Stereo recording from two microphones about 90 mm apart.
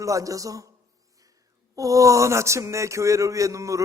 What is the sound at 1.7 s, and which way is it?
A man's voice, 40° right (ahead or behind).